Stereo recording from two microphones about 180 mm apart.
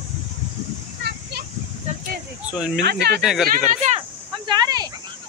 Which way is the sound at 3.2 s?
Centre (ahead or behind).